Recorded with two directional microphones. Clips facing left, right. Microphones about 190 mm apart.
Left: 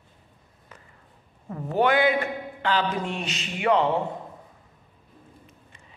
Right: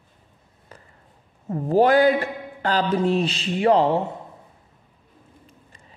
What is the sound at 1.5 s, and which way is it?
A woman's voice, 35° right (ahead or behind).